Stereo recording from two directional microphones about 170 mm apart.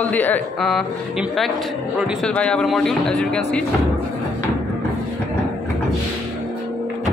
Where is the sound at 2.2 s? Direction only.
5° left (ahead or behind).